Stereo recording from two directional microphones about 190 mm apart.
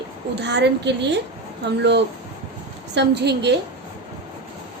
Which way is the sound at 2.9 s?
60° right (ahead or behind).